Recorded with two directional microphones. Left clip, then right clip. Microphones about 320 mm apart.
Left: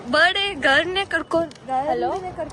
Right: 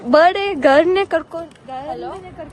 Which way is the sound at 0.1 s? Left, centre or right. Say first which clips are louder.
Right 5 dB; centre.